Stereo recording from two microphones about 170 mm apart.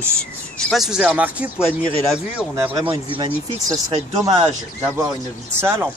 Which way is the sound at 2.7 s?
30° right (ahead or behind).